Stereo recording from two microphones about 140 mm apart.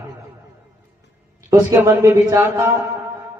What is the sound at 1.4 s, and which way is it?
A man's voice, 20° right (ahead or behind).